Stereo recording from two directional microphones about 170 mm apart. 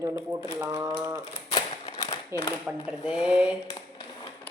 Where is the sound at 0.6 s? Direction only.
15° right (ahead or behind).